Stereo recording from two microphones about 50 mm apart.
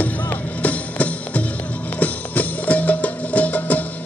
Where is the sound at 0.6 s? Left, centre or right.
Left.